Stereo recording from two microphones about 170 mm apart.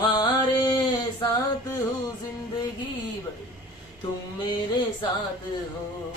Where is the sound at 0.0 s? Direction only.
25° left (ahead or behind).